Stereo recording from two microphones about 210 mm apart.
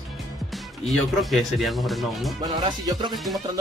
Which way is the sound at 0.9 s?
Centre (ahead or behind).